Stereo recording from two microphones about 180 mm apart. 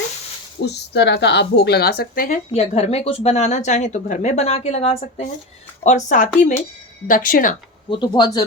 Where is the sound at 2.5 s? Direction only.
35° left (ahead or behind).